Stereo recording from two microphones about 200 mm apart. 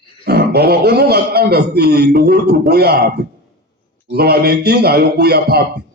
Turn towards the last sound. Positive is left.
turn(degrees=-50)  # may be behind; listen again after turning